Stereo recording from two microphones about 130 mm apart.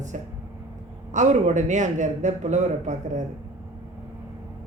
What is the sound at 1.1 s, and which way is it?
Speech, 70° right (ahead or behind).